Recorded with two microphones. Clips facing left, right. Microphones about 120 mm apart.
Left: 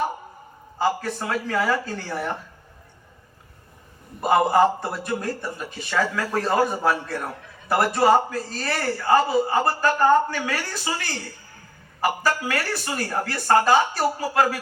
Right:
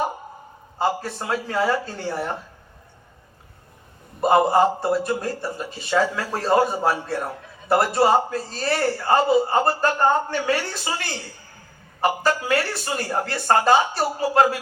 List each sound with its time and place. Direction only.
0.8 s a man's voice: 25° right (ahead or behind)
4.2 s a man's voice: 25° right (ahead or behind)
12.0 s a man's voice: 25° right (ahead or behind)